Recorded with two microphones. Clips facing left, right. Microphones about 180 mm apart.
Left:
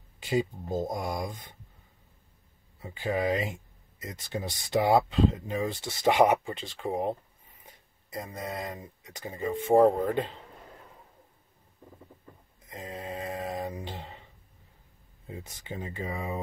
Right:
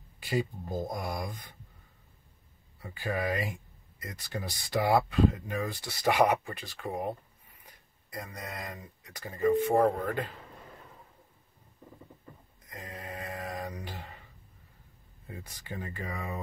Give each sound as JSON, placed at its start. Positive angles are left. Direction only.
{"t": 0.2, "sound": "speech", "side_deg": 20}
{"t": 2.8, "sound": "speech", "side_deg": 20}
{"t": 12.6, "sound": "a sound", "side_deg": 25}
{"t": 15.2, "sound": "speech", "side_deg": 20}